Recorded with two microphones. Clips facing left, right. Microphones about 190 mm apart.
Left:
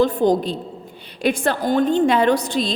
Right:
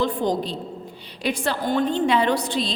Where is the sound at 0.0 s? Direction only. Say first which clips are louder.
Left 6 dB; 45° left (ahead or behind).